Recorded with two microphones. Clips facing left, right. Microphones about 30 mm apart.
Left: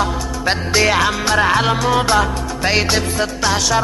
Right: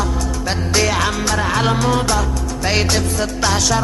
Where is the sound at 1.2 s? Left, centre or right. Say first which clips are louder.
Left 4 dB; left.